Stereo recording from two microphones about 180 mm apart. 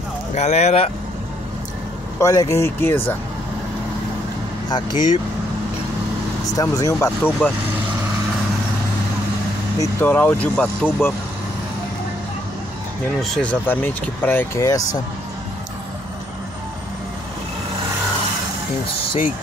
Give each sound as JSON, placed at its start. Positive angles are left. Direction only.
{"t": 0.3, "sound": "speech", "side_deg": 40}
{"t": 2.1, "sound": "speech", "side_deg": 15}
{"t": 4.6, "sound": "speech", "side_deg": 25}
{"t": 6.5, "sound": "speech", "side_deg": 20}
{"t": 9.8, "sound": "speech", "side_deg": 10}
{"t": 13.2, "sound": "speech", "side_deg": 5}